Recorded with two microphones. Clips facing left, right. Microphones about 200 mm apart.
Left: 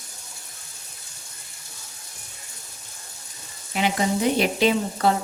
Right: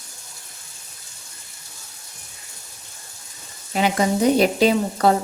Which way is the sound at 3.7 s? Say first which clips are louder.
Right 3 dB; 40° right (ahead or behind).